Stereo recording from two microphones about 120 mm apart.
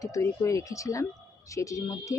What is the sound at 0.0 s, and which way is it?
Speech, 25° left (ahead or behind).